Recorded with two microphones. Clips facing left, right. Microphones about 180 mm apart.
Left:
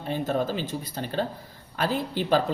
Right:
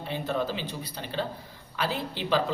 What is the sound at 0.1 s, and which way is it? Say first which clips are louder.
A man's voice: left 3 dB; 45° left (ahead or behind).